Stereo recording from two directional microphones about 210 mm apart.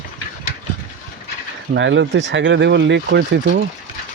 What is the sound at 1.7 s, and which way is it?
Speech, 60° right (ahead or behind).